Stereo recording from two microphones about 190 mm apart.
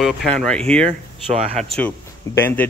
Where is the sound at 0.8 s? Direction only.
35° right (ahead or behind).